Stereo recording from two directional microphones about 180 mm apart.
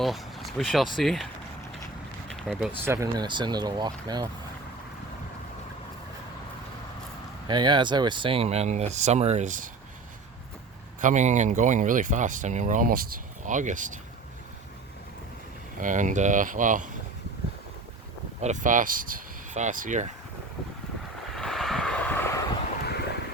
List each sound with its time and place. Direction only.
0.0 s speech: centre (ahead or behind); by 4.3 s 25° right (ahead or behind)
7.4 s speech: 25° right (ahead or behind); by 9.6 s 45° right (ahead or behind)
11.0 s speech: 40° right (ahead or behind)
15.8 s speech: 45° right (ahead or behind)
18.4 s speech: 45° right (ahead or behind)
21.3 s vehicle: centre (ahead or behind)
22.8 s wind: 65° left (ahead or behind)